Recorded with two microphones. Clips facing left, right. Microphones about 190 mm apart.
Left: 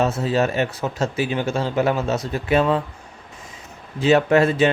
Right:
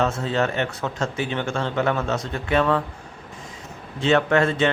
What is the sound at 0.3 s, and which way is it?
Speech, 15° left (ahead or behind).